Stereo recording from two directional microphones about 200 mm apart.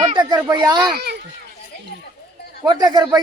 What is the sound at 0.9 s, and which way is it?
Speech, 55° right (ahead or behind).